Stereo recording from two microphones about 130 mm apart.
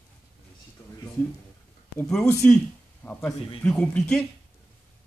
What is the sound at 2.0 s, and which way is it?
A man's voice, 5° left (ahead or behind).